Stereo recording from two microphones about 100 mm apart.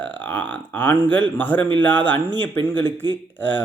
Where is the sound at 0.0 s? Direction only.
15° left (ahead or behind).